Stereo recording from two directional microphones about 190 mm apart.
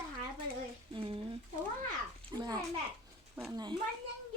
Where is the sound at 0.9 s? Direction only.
30° right (ahead or behind).